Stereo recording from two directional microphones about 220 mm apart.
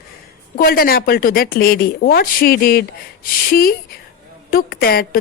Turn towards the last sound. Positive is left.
turn(degrees=45)  # may be behind; listen again after turning